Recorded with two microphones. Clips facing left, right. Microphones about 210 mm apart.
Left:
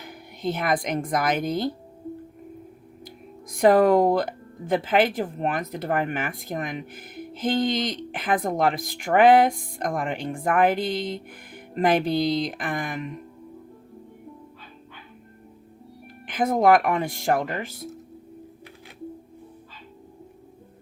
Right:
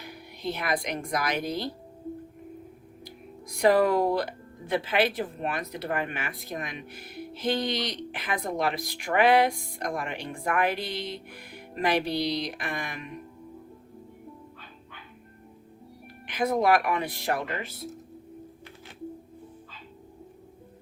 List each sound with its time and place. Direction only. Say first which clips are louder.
0.0 s speech: left 5 dB; 50° left (ahead or behind)
3.5 s speech: left 5 dB; 50° left (ahead or behind)
16.2 s speech: left 4 dB; 50° left (ahead or behind)